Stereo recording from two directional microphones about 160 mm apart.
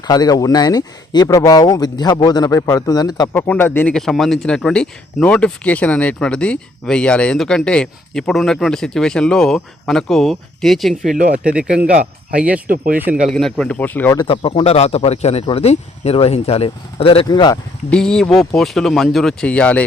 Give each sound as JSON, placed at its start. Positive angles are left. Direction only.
{"t": 0.1, "sound": "speech", "side_deg": 25}
{"t": 3.3, "sound": "speech", "side_deg": 10}
{"t": 12.6, "sound": "speech", "side_deg": -60}
{"t": 13.0, "sound": "speech", "side_deg": -10}
{"t": 14.2, "sound": "speech", "side_deg": 30}
{"t": 17.9, "sound": "speech", "side_deg": 5}